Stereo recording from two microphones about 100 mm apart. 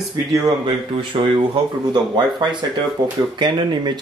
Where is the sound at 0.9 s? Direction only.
75° right (ahead or behind).